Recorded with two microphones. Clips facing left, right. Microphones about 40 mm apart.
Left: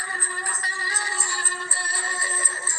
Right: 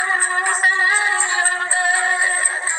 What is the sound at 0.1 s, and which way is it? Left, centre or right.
Music, right.